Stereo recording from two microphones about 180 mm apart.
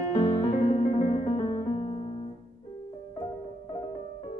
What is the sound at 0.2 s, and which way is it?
Piano, 20° left (ahead or behind).